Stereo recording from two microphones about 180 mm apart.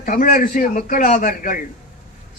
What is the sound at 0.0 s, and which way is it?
A man's voice, 50° left (ahead or behind).